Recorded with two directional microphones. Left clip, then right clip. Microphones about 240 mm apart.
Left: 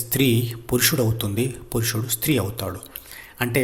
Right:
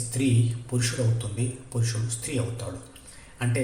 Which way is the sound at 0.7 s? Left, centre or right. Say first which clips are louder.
Left 10 dB; left.